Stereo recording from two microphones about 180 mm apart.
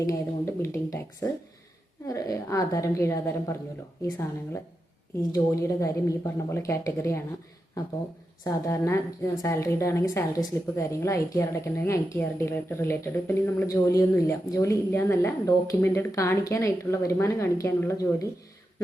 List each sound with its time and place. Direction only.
0.0 s speech: 15° left (ahead or behind)
8.4 s speech: 15° left (ahead or behind)